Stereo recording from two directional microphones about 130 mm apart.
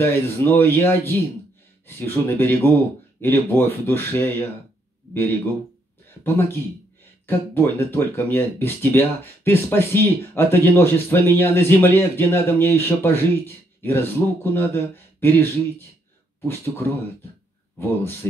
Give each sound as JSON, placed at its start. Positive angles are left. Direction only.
{"t": 0.0, "sound": "speech", "side_deg": 15}
{"t": 6.2, "sound": "speech", "side_deg": 15}